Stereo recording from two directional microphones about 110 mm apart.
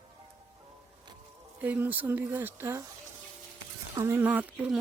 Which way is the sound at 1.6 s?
15° right (ahead or behind).